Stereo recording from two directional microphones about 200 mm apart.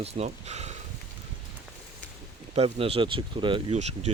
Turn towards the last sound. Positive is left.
turn(degrees=-35)  # may be behind; listen again after turning